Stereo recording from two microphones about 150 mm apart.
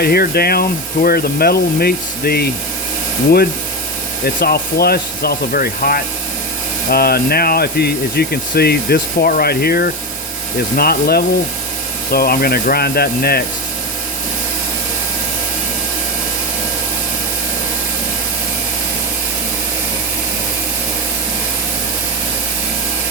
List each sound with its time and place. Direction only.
0.0 s speech: 90° left
4.4 s speech: 90° left
6.9 s speech: 90° left